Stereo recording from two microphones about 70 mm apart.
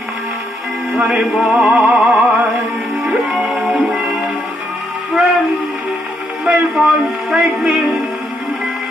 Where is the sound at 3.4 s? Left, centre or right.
Right.